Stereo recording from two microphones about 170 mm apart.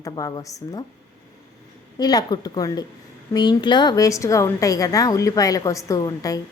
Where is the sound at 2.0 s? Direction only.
20° left (ahead or behind).